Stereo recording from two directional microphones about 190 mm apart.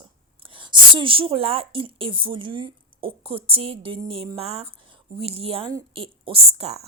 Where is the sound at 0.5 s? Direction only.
25° right (ahead or behind).